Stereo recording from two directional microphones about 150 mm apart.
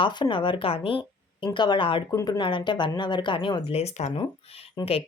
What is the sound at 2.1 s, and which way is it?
Speech, 20° left (ahead or behind).